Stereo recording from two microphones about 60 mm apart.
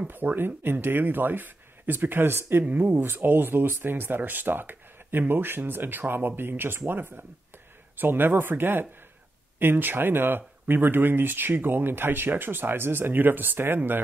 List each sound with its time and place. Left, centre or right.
0.0 s speech: right